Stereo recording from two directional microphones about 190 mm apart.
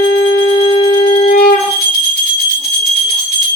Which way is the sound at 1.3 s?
45° left (ahead or behind).